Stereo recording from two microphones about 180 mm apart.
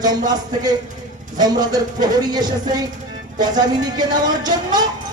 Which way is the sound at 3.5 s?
20° right (ahead or behind).